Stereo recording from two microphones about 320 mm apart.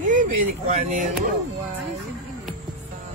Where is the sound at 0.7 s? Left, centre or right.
Right.